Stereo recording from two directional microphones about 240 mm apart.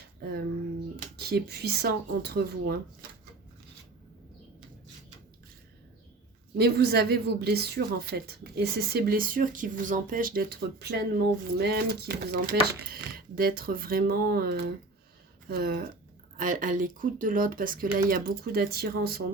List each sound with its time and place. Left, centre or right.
0.9 s speech: right
6.6 s a woman's voice: right